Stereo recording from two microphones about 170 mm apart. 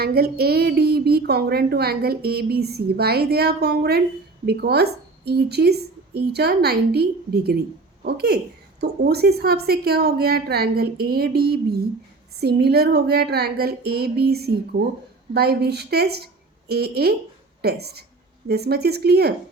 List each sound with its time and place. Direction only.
0.0 s a woman's voice: 65° right (ahead or behind)